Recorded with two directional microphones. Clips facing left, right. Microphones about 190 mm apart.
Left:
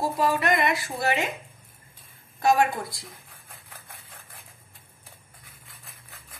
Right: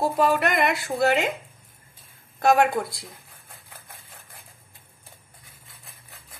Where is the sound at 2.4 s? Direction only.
60° right (ahead or behind).